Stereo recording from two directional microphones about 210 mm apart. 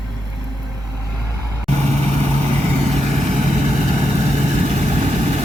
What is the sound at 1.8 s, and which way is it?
Vehicle, 30° right (ahead or behind).